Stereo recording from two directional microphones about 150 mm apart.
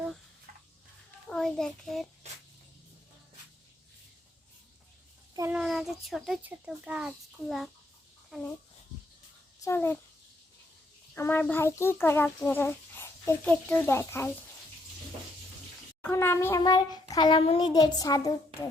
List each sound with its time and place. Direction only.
1.3 s a child's voice: 5° left (ahead or behind)
5.5 s a child's voice: 5° right (ahead or behind)
9.6 s a child's voice: 15° left (ahead or behind)
11.1 s a child's voice: 15° left (ahead or behind)
16.0 s a child's voice: 15° left (ahead or behind)
17.4 s a woman's voice: 40° left (ahead or behind)
17.7 s a child's voice: 25° left (ahead or behind)